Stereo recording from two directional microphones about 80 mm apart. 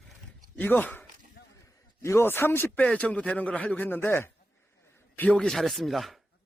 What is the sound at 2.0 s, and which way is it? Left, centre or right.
Speech, left.